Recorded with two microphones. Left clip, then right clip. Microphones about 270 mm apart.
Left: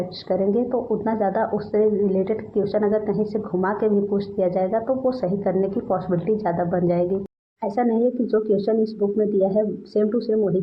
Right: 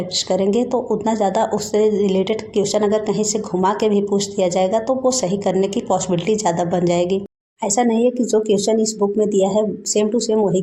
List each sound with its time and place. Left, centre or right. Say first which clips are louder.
0.3 s speech: right 2 dB; right